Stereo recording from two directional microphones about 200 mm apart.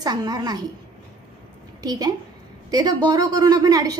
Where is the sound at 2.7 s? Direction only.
20° right (ahead or behind).